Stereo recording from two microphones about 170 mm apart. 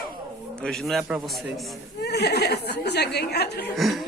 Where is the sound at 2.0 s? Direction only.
75° left (ahead or behind).